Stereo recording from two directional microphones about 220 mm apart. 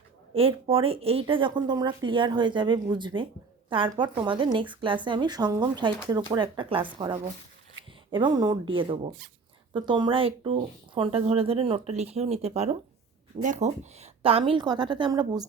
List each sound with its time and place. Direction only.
0.3 s speech: 25° right (ahead or behind)
8.1 s speech: 20° right (ahead or behind)